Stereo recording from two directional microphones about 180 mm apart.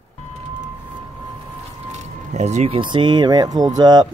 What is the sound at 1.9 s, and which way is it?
Speech, 40° right (ahead or behind).